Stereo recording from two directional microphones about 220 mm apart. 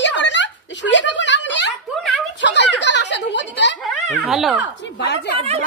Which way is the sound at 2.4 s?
55° left (ahead or behind).